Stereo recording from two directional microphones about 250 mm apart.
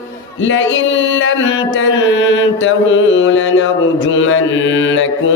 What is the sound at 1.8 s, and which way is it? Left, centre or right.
Mantra, left.